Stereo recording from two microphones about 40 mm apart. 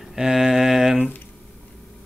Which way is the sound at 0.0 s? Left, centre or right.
Centre.